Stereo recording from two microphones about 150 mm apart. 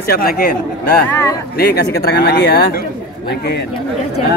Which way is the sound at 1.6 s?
90° left.